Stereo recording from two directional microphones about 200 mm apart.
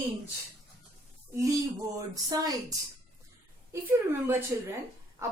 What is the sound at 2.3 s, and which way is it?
Speech, 20° right (ahead or behind).